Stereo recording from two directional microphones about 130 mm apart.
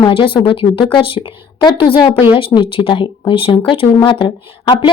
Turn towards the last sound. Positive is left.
turn(degrees=40)  # may be behind; listen again after turning